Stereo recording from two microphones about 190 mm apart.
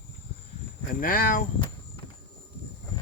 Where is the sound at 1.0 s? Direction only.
45° left (ahead or behind).